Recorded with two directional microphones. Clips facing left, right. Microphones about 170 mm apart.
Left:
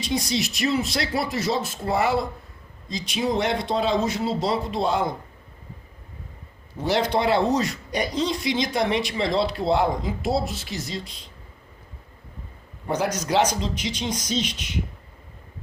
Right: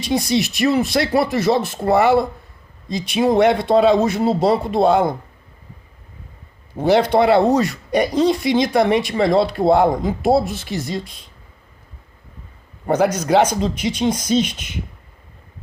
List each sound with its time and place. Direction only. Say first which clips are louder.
0.0 s speech: right 6 dB; 60° right (ahead or behind)
6.7 s speech: right 8 dB; 55° right (ahead or behind)
12.9 s speech: right 8 dB; 55° right (ahead or behind)